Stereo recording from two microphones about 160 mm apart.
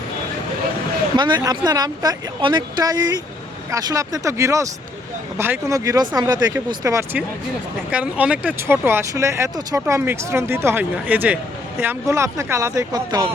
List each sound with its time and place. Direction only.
1.1 s speech: 30° right (ahead or behind)
7.9 s speech: 5° right (ahead or behind); by 13.2 s 25° right (ahead or behind)